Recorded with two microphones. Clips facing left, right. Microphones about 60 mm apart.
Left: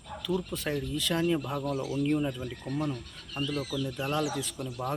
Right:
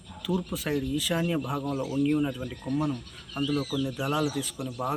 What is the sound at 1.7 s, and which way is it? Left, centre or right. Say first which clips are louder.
Speech: right 2 dB; right.